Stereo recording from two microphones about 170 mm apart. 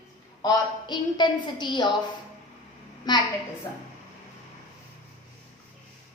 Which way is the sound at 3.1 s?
25° left (ahead or behind).